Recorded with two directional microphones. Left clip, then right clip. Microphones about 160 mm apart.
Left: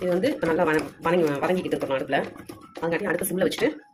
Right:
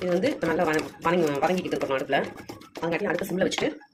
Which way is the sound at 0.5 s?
10° left (ahead or behind).